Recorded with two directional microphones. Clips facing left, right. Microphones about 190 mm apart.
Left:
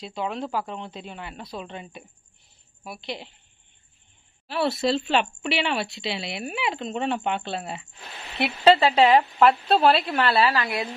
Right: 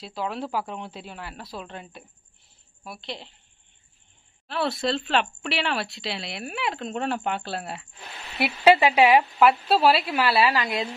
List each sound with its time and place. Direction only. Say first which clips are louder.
0.0 s speech: left 1 dB; centre (ahead or behind)
4.5 s speech: left 2 dB; 5° left (ahead or behind)
8.7 s a woman's voice: even; 15° right (ahead or behind)